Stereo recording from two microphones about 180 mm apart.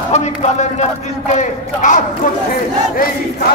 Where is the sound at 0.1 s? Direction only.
40° left (ahead or behind).